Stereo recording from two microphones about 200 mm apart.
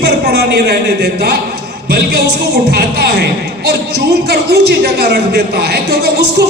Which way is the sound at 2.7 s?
55° right (ahead or behind).